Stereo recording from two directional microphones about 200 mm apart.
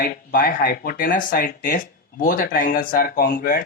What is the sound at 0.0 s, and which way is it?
Speech, 50° left (ahead or behind).